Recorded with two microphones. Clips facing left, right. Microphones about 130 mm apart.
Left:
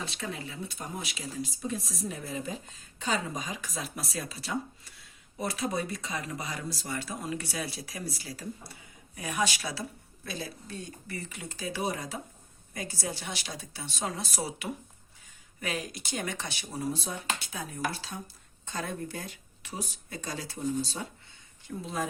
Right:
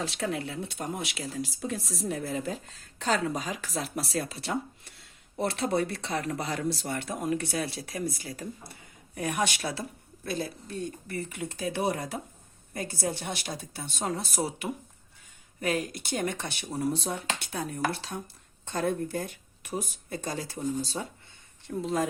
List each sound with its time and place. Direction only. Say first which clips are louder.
0.1 s speech: right 6 dB; 75° right (ahead or behind)
1.5 s speech: left 1 dB; 90° right
2.0 s speech: right 6 dB; 65° right (ahead or behind)
4.2 s speech: even; 65° right (ahead or behind)
18.7 s speech: right 7 dB; 50° right (ahead or behind)